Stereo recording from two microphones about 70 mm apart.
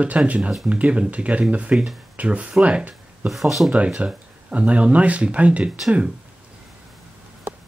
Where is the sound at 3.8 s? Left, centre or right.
Centre.